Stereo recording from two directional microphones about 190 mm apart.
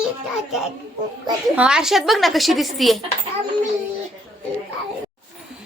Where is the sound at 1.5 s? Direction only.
5° right (ahead or behind).